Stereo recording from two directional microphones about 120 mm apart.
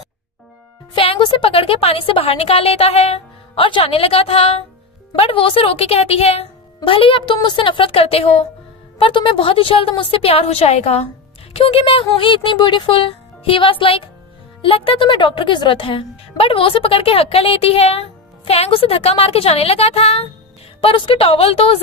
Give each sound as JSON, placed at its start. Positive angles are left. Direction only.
{"t": 0.9, "sound": "a woman's voice", "side_deg": 50}